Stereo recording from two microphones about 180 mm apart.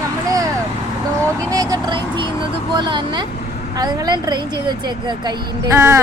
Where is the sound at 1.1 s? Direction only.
15° right (ahead or behind).